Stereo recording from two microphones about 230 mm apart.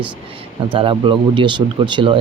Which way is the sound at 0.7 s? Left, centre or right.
Right.